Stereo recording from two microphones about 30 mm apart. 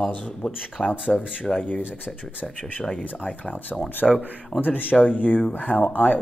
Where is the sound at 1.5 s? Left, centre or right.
Centre.